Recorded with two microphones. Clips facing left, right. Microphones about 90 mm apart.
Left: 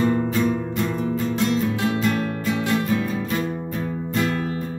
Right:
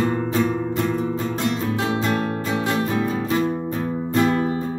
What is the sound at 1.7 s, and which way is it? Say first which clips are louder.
Music: even; 25° right (ahead or behind).